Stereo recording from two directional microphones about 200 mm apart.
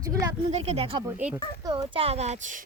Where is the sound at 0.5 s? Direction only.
30° right (ahead or behind).